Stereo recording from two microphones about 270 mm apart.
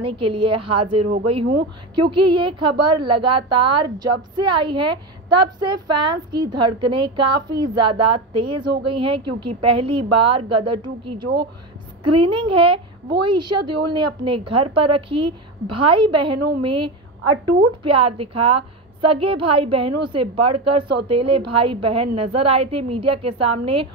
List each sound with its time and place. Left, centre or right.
0.0 s a woman's voice: centre
17.2 s a woman's voice: right
17.8 s a woman's voice: centre
21.1 s a woman's voice: centre